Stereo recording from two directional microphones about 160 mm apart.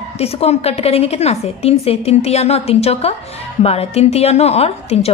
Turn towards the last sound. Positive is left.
turn(degrees=40)  # may be behind; listen again after turning